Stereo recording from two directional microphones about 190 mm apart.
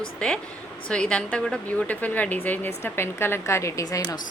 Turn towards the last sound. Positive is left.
turn(degrees=15)  # may be behind; listen again after turning